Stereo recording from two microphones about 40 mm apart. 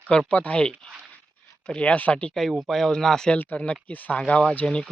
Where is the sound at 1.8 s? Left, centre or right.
Left.